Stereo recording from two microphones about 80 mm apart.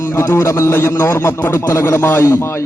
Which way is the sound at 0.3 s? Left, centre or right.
Left.